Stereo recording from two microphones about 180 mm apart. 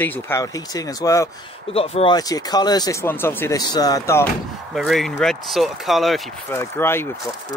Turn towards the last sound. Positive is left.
turn(degrees=15)  # may be behind; listen again after turning